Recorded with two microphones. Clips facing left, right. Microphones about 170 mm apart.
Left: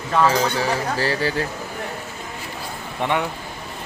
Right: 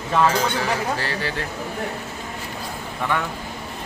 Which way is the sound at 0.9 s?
35° left (ahead or behind).